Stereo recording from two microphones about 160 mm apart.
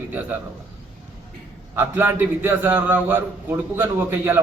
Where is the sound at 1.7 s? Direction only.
15° right (ahead or behind).